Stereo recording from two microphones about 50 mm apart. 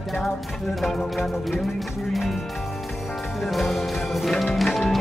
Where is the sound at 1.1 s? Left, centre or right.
Centre.